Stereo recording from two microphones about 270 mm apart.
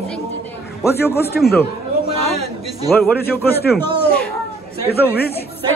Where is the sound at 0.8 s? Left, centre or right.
Centre.